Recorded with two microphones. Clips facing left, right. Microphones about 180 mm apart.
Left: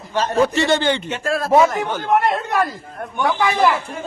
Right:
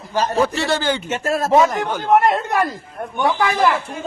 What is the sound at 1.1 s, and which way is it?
Speech, 45° right (ahead or behind).